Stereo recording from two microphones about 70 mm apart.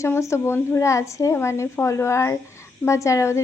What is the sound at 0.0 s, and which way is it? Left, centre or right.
A woman's voice, left.